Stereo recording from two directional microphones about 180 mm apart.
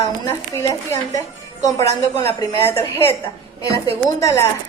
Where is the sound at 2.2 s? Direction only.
15° left (ahead or behind).